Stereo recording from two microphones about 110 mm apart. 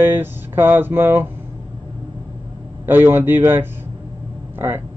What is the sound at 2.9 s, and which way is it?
Speech, 20° right (ahead or behind).